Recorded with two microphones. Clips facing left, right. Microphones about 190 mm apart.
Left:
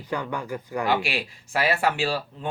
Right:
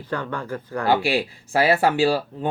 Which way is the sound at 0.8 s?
30° right (ahead or behind).